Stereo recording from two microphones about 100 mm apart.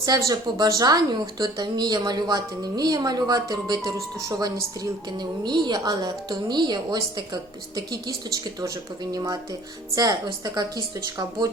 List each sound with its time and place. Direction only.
0.3 s a woman's voice: 40° right (ahead or behind)
8.6 s a woman's voice: 35° right (ahead or behind)